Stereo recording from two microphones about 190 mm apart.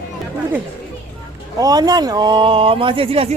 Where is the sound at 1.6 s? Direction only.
20° right (ahead or behind).